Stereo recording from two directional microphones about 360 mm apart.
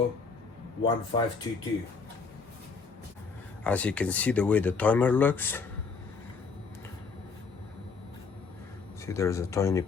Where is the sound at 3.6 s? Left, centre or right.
Centre.